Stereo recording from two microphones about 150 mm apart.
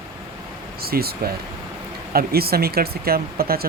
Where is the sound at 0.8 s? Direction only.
90° right.